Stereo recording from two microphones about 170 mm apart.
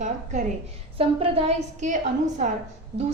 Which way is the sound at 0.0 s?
45° right (ahead or behind).